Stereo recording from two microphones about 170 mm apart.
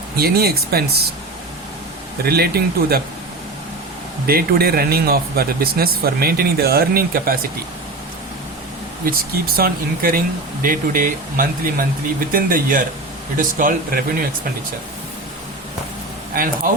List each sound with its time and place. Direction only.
0.2 s speech: 65° right (ahead or behind)
2.2 s speech: 65° right (ahead or behind)
4.3 s speech: 65° right (ahead or behind)
9.0 s speech: 60° right (ahead or behind)
16.3 s speech: 55° right (ahead or behind)